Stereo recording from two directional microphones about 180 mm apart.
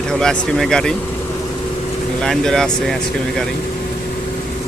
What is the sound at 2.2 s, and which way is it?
A man's voice, 5° left (ahead or behind).